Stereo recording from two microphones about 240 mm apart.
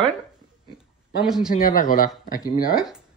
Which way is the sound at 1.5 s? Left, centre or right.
Left.